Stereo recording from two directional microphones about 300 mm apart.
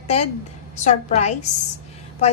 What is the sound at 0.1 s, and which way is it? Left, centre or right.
A woman's voice, left.